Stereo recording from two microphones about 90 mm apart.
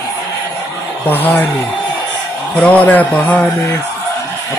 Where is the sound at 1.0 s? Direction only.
20° left (ahead or behind).